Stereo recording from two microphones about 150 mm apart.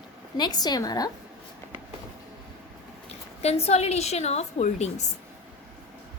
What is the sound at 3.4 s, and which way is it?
A woman's voice, 45° left (ahead or behind).